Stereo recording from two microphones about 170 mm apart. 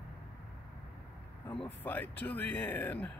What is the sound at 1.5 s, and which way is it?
Speech, 10° left (ahead or behind).